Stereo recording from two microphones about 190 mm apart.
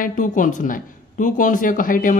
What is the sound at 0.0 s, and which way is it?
A woman's voice, 40° left (ahead or behind).